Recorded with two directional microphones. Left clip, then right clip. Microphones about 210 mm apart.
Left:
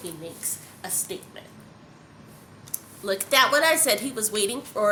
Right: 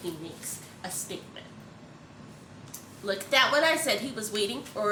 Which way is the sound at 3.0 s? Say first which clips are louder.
Left 4 dB; 50° left (ahead or behind).